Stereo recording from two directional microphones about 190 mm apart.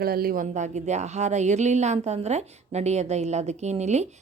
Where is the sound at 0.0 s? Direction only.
50° right (ahead or behind).